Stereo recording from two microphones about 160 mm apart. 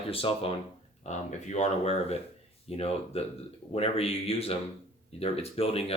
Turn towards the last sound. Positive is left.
turn(degrees=40)  # may be behind; listen again after turning